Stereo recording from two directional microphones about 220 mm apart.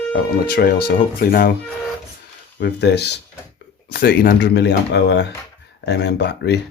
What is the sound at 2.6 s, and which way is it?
Speech, 50° left (ahead or behind).